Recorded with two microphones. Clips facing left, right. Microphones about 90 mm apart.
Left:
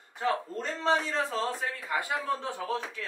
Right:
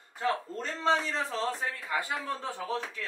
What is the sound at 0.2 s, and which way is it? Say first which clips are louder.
A man's voice: left 1 dB; 10° left (ahead or behind).